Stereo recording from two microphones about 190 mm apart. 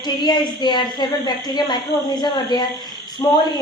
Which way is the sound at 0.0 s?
20° left (ahead or behind).